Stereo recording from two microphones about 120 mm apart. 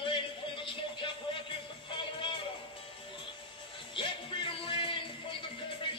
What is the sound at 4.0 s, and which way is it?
Music, 45° left (ahead or behind).